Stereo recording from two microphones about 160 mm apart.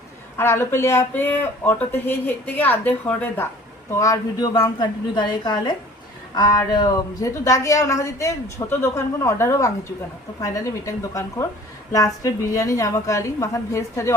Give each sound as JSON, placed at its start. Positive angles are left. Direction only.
{"t": 0.3, "sound": "speech", "side_deg": 15}